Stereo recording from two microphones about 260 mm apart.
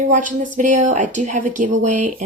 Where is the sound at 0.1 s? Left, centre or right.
Right.